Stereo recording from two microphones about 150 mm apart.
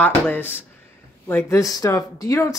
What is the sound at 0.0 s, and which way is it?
A woman's voice, 15° left (ahead or behind).